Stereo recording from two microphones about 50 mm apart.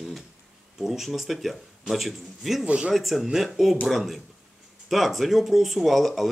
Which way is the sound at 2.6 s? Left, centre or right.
Right.